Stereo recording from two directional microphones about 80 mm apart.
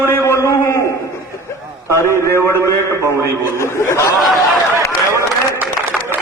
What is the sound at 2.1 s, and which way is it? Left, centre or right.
A man's voice, left.